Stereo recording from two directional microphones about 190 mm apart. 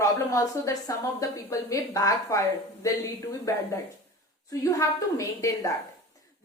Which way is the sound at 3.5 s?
15° left (ahead or behind).